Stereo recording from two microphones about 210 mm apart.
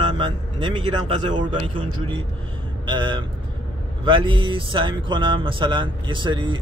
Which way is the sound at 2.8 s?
20° right (ahead or behind).